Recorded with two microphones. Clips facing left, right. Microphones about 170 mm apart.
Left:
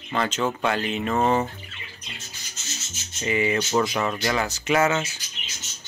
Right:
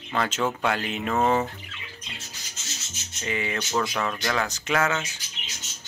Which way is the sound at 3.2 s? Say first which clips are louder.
Left 6 dB; 10° left (ahead or behind).